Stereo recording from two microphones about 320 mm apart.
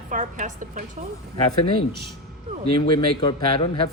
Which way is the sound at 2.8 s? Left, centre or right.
Centre.